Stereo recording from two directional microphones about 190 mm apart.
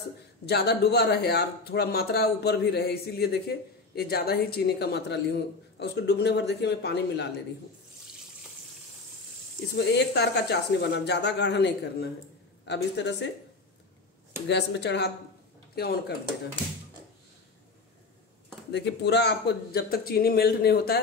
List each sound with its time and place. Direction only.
0.5 s speech: 60° left (ahead or behind)
9.8 s speech: 60° left (ahead or behind)
14.5 s speech: 65° left (ahead or behind)
18.7 s speech: 65° left (ahead or behind)